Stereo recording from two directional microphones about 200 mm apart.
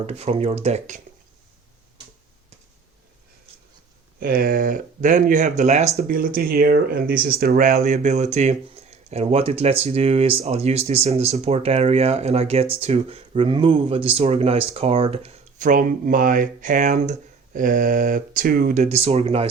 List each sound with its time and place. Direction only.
0.0 s speech: 30° right (ahead or behind)
4.2 s speech: 45° right (ahead or behind)
6.1 s speech: 45° right (ahead or behind); by 19.5 s 30° right (ahead or behind)